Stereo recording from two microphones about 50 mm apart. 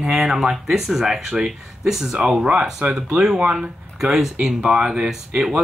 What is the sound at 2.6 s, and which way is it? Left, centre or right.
Speech, centre.